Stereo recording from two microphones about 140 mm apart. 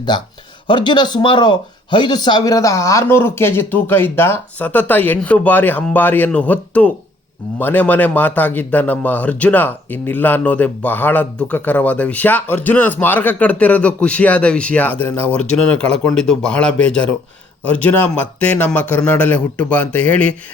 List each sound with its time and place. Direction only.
0.7 s a man's voice: 35° left (ahead or behind); by 20.3 s 10° left (ahead or behind)